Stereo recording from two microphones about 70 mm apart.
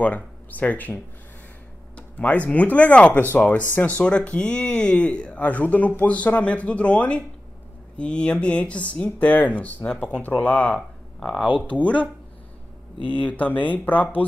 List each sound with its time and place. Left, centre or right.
0.0 s speech: left
2.0 s speech: centre
11.1 s speech: centre
11.6 s speech: left